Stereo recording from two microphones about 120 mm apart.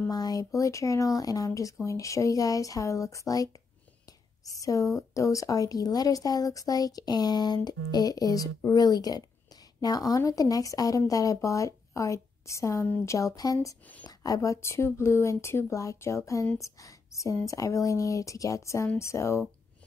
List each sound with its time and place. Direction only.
0.1 s speech: 30° left (ahead or behind)
4.5 s speech: 30° left (ahead or behind)